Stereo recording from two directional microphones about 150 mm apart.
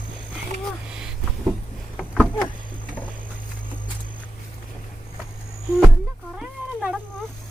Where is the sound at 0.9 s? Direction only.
5° right (ahead or behind).